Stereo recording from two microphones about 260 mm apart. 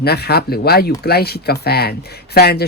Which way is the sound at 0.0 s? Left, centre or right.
Left.